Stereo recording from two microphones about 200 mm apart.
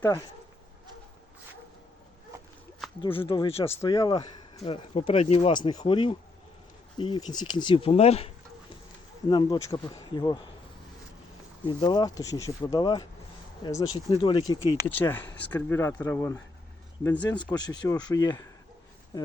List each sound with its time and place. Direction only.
0.0 s speech: 15° left (ahead or behind)
3.0 s speech: 25° left (ahead or behind)
9.3 s speech: 20° left (ahead or behind)
11.6 s speech: 25° left (ahead or behind)
14.8 s speech: 10° left (ahead or behind)
17.2 s speech: 20° left (ahead or behind)